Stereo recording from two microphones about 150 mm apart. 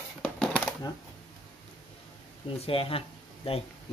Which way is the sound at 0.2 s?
5° left (ahead or behind).